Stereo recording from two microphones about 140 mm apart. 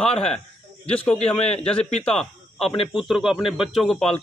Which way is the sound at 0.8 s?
5° left (ahead or behind).